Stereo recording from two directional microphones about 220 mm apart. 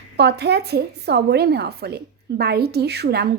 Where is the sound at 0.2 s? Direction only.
50° right (ahead or behind).